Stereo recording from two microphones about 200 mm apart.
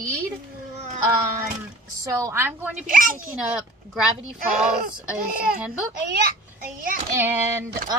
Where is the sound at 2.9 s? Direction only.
45° right (ahead or behind).